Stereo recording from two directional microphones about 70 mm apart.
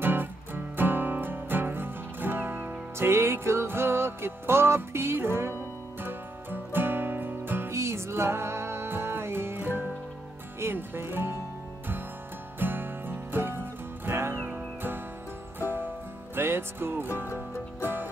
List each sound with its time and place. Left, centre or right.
0.0 s music: right
7.7 s music: right
10.6 s speech: right
12.5 s music: right